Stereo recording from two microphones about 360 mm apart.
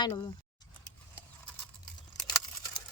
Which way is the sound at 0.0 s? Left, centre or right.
Centre.